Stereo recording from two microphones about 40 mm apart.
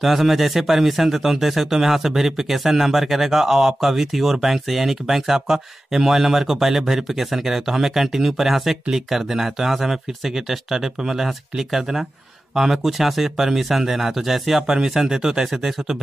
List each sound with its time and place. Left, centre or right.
0.0 s speech: centre